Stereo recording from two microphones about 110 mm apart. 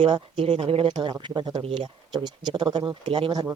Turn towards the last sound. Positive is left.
turn(degrees=-50)  # may be behind; listen again after turning